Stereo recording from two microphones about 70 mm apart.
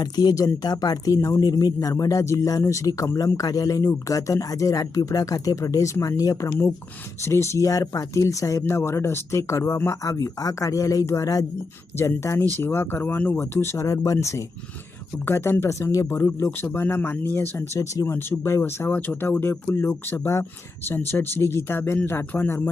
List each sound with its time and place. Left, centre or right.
0.0 s speech: left
2.2 s speech: left
8.6 s speech: left
9.7 s speech: left
10.0 s speech: left
11.9 s speech: left
13.1 s speech: left
13.4 s speech: left
13.7 s speech: left
15.3 s speech: left
18.9 s speech: left